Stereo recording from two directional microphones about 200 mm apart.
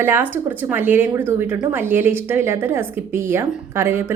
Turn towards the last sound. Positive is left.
turn(degrees=-10)  # may be behind; listen again after turning